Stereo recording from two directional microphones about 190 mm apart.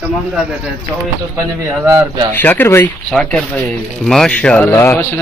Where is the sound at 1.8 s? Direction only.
15° right (ahead or behind).